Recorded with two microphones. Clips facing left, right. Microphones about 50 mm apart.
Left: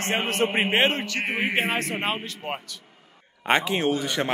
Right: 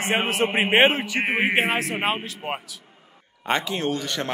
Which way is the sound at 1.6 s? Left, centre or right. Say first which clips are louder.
Right 2 dB; centre.